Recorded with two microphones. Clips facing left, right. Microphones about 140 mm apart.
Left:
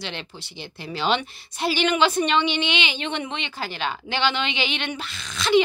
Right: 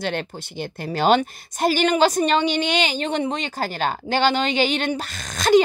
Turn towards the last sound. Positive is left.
turn(degrees=-45)  # may be behind; listen again after turning